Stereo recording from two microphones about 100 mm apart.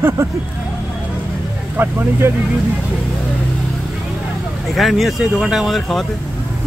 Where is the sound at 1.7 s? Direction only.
20° right (ahead or behind).